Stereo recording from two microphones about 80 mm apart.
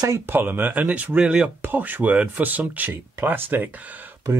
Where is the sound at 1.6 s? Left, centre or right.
Right.